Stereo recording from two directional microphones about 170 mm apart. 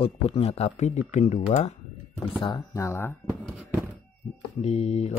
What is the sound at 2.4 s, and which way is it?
Speech, 25° left (ahead or behind).